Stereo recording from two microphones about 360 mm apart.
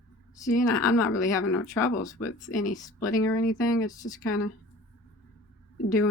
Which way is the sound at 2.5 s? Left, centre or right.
Left.